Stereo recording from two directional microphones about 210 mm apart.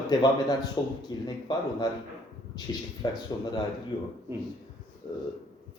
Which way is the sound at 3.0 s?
20° left (ahead or behind).